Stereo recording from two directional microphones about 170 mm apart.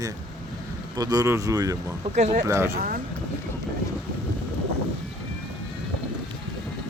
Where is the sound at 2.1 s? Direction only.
45° right (ahead or behind).